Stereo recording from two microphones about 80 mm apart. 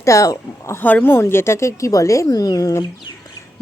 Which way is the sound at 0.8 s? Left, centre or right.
Left.